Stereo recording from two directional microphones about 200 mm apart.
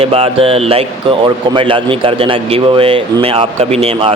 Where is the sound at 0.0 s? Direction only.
30° right (ahead or behind).